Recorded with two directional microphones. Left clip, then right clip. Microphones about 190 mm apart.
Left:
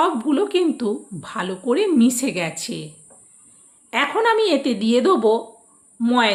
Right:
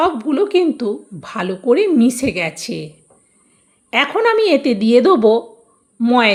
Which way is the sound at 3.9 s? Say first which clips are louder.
Right 4 dB; 30° right (ahead or behind).